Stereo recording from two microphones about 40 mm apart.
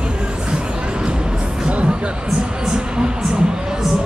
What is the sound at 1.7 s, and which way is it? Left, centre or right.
Music, right.